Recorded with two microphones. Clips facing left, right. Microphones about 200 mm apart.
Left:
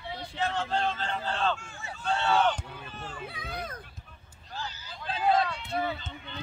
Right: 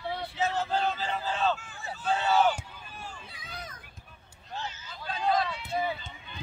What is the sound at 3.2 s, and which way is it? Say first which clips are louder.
Speech: left 6 dB; 60° left (ahead or behind).